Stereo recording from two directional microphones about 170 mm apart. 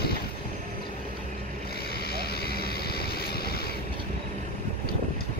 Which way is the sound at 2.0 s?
65° left (ahead or behind).